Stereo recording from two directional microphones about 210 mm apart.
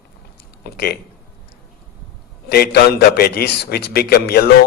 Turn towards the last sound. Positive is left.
turn(degrees=45)  # may be behind; listen again after turning